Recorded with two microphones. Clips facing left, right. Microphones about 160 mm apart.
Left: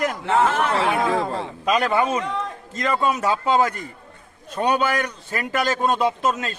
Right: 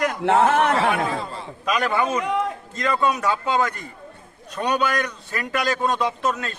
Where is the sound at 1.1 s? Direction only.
90° left.